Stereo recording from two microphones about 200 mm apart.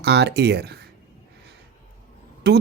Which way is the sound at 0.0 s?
55° right (ahead or behind).